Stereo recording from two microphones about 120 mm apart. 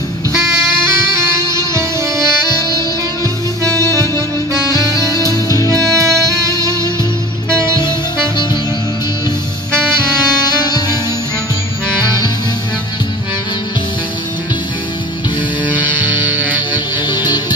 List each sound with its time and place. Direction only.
1.3 s music: 25° right (ahead or behind)
3.6 s music: 25° right (ahead or behind)
5.3 s music: 30° left (ahead or behind)
5.7 s music: 30° right (ahead or behind)
15.9 s music: 15° right (ahead or behind)